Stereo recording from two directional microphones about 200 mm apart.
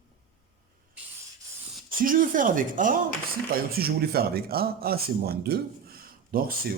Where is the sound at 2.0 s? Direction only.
45° right (ahead or behind).